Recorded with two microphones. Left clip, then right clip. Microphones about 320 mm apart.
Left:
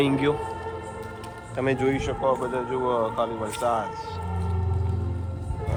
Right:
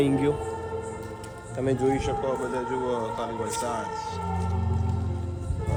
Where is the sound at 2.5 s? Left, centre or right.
Centre.